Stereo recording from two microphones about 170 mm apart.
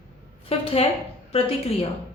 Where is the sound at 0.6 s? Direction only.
35° left (ahead or behind).